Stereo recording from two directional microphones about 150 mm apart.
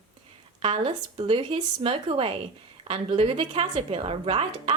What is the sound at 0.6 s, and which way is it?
Speech, 35° right (ahead or behind).